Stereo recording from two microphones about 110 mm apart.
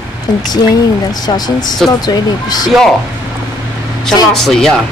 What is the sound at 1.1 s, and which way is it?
Speech, 40° left (ahead or behind).